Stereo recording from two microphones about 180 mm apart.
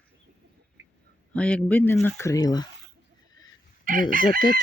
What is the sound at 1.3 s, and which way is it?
Speech, 5° left (ahead or behind).